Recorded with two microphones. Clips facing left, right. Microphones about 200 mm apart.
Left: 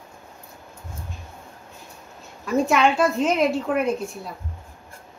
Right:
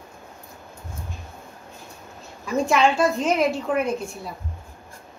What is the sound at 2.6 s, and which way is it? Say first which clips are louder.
A woman's voice: right 1 dB; centre (ahead or behind).